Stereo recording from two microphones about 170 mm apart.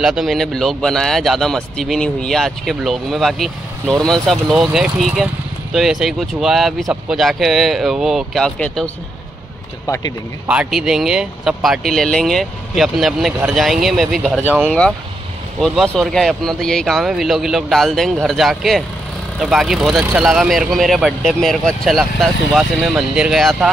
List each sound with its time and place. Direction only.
0.0 s speech: centre (ahead or behind)
10.4 s speech: 5° right (ahead or behind)
15.6 s speech: centre (ahead or behind)